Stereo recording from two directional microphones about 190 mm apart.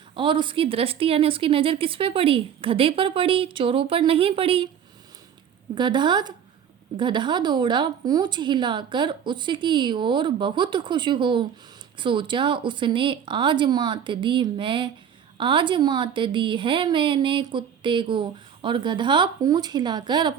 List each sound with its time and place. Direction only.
0.2 s speech: 25° right (ahead or behind)
5.7 s speech: 25° right (ahead or behind)